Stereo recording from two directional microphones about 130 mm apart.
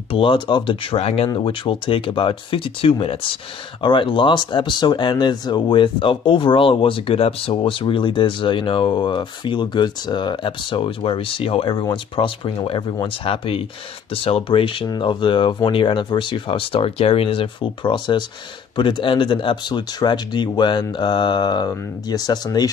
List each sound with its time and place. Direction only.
0.1 s speech: 40° left (ahead or behind)